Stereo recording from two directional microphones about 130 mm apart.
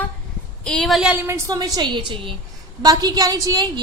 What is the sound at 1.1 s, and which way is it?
A woman's voice, 20° right (ahead or behind).